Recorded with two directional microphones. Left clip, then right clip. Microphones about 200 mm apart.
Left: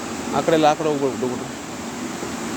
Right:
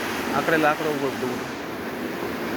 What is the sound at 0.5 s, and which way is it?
Speech, 25° left (ahead or behind).